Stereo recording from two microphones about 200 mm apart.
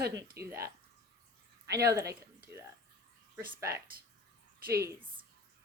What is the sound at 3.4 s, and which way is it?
Speech, 50° right (ahead or behind).